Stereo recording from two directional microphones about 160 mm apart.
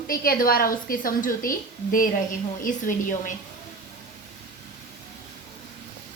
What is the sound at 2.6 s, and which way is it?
Speech, 60° left (ahead or behind).